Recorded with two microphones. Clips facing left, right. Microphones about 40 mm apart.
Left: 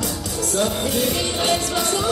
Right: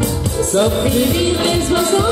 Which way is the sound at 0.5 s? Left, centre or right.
Right.